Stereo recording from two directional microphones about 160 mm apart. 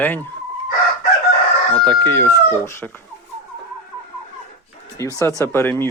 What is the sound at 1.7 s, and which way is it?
Speech, 15° left (ahead or behind).